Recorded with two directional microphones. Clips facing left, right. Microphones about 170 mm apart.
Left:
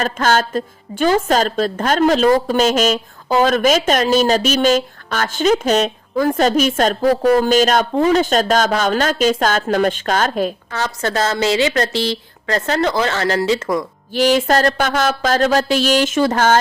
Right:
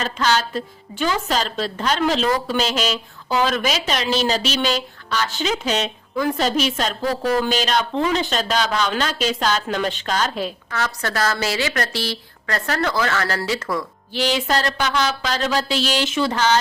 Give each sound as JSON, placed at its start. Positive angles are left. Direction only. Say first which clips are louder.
{"t": 0.0, "sound": "a woman's voice", "louder": "left 4 dB", "side_deg": 50}
{"t": 10.7, "sound": "a woman's voice", "louder": "left 4 dB", "side_deg": 25}
{"t": 14.1, "sound": "a woman's voice", "louder": "left 7 dB", "side_deg": 50}